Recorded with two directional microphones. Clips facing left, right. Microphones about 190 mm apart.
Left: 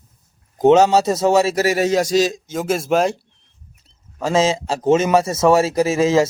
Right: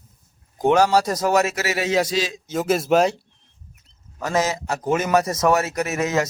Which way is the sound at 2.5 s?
Centre (ahead or behind).